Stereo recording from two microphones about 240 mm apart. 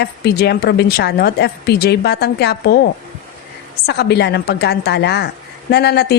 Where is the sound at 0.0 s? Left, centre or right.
Left.